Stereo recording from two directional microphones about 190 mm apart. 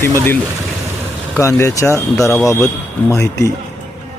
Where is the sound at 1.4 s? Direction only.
15° left (ahead or behind).